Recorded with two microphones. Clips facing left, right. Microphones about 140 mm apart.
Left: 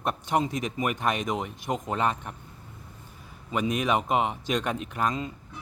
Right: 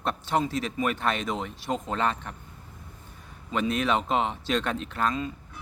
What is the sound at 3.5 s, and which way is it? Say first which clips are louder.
Speech: even; 15° left (ahead or behind).